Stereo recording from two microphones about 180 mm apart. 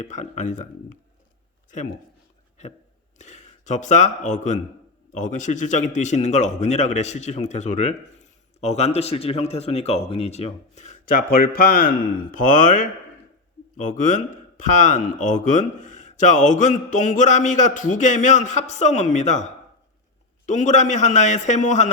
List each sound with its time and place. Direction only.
0.0 s a man's voice: 40° left (ahead or behind)
3.2 s a man's voice: 40° left (ahead or behind)
20.5 s a man's voice: 40° left (ahead or behind)